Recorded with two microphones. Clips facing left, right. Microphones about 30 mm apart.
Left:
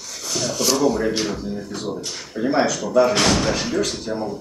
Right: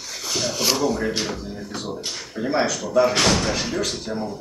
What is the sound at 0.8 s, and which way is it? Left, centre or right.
Speech, centre.